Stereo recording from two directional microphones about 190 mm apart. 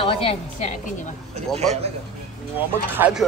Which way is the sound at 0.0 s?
30° left (ahead or behind).